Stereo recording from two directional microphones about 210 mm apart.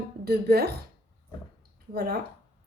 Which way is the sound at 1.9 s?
50° right (ahead or behind).